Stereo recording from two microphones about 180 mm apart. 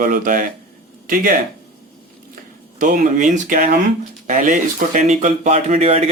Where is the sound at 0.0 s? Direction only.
50° right (ahead or behind).